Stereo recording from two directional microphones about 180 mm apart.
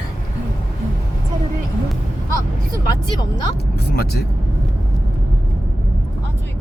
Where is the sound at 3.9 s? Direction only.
60° left (ahead or behind).